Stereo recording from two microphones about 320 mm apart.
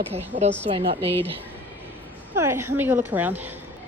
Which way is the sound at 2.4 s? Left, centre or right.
Centre.